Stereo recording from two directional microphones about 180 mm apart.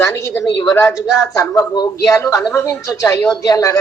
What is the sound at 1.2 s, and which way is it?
A man's voice, 20° left (ahead or behind).